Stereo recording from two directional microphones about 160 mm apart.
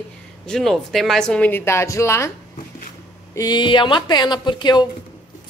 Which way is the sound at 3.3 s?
25° left (ahead or behind).